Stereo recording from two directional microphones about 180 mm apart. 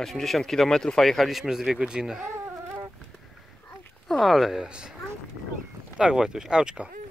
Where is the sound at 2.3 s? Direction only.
15° right (ahead or behind).